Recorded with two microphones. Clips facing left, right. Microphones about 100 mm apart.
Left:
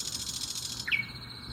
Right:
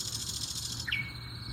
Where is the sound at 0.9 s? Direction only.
75° left (ahead or behind).